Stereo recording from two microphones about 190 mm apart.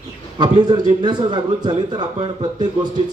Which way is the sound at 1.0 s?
25° right (ahead or behind).